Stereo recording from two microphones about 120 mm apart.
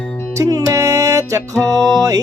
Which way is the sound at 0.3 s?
30° right (ahead or behind).